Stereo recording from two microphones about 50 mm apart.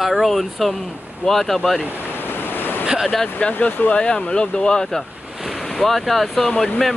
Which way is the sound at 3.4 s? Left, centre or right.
Left.